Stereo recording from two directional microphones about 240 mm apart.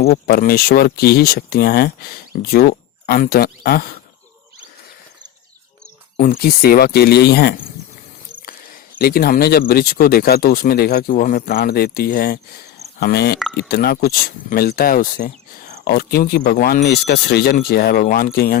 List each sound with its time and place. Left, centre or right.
0.0 s speech: left
6.1 s speech: left
9.0 s speech: left